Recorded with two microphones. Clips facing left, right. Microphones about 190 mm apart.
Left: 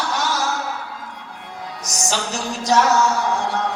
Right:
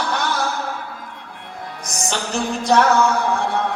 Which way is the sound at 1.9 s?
55° right (ahead or behind).